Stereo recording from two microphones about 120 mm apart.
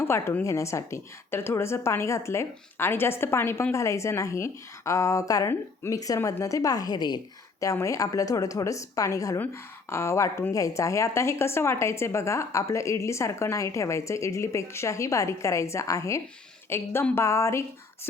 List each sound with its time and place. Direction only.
0.0 s a woman's voice: 20° left (ahead or behind)